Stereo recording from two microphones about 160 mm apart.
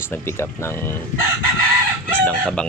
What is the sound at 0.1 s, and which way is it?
Speech, 15° left (ahead or behind).